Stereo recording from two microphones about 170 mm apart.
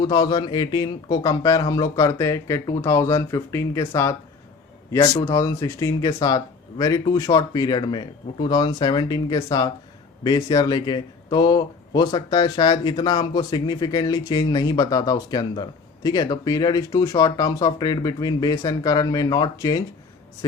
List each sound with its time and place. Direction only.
0.0 s a man's voice: 25° left (ahead or behind)